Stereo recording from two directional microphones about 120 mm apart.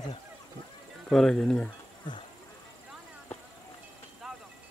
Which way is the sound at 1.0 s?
5° left (ahead or behind).